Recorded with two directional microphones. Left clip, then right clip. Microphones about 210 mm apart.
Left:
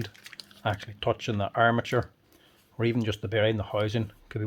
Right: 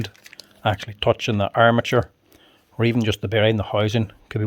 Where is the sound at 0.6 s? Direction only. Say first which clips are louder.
Right 8 dB; 50° right (ahead or behind).